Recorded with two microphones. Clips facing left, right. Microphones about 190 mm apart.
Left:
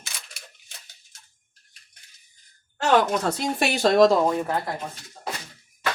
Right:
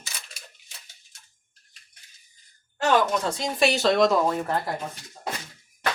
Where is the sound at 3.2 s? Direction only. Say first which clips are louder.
Right 1 dB; 60° left (ahead or behind); by 4.2 s 40° left (ahead or behind).